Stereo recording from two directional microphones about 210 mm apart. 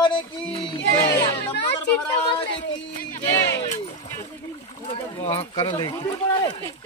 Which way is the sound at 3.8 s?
30° left (ahead or behind).